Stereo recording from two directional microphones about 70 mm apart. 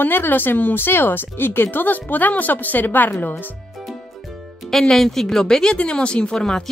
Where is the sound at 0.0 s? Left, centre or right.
Left.